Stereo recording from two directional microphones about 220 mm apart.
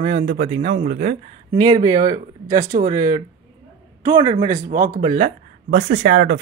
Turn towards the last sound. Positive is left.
turn(degrees=-40)  # may be behind; listen again after turning